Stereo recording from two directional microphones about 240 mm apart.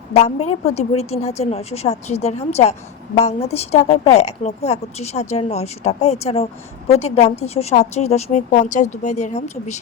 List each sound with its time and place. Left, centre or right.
0.1 s speech: left